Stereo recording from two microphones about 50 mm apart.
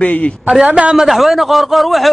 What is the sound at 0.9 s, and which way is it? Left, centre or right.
A man's voice, centre.